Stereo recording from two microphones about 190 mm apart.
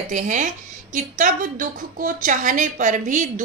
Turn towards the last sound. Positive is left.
turn(degrees=-40)  # may be behind; listen again after turning